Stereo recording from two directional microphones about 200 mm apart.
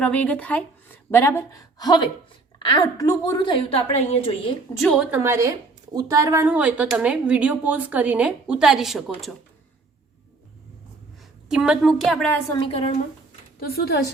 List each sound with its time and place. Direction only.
0.0 s a woman's voice: 5° left (ahead or behind); by 4.2 s 30° left (ahead or behind)
4.8 s a woman's voice: centre (ahead or behind)
5.2 s speech: 15° right (ahead or behind)
11.4 s a woman's voice: 5° right (ahead or behind)
12.5 s a woman's voice: 25° left (ahead or behind)
13.6 s a woman's voice: 50° left (ahead or behind)